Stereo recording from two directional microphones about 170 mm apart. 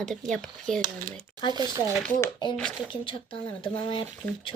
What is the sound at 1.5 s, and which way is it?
Speech, 25° right (ahead or behind).